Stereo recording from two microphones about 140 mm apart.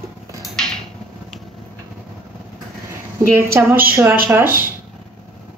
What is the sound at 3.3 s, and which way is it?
A woman's voice, 20° right (ahead or behind).